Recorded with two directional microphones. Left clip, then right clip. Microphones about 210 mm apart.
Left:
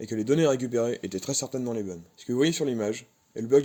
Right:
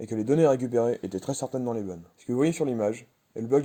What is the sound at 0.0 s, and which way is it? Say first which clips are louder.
Speech: right 1 dB; 30° right (ahead or behind).